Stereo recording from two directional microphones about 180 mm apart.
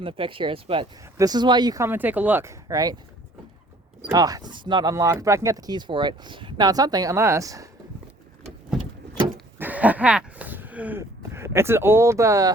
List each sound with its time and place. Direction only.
0.0 s speech: 30° right (ahead or behind)
4.1 s speech: 20° right (ahead or behind)
9.6 s a sound: 10° right (ahead or behind)